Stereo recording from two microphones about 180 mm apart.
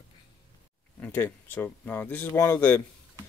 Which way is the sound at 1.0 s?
10° left (ahead or behind).